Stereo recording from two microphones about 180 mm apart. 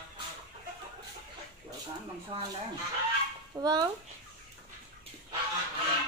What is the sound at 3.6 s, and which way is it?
Speech, 20° right (ahead or behind).